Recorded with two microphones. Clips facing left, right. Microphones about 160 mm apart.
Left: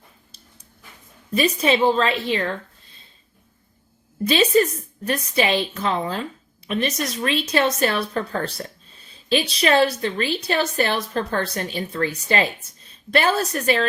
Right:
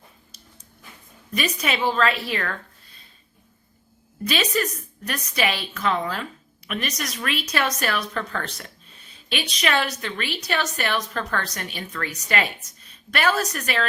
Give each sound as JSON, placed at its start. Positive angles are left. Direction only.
{"t": 1.3, "sound": "a woman's voice", "side_deg": 30}
{"t": 4.2, "sound": "speech", "side_deg": 30}